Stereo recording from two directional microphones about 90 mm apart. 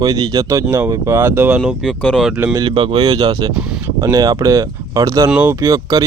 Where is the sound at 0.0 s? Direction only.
45° right (ahead or behind).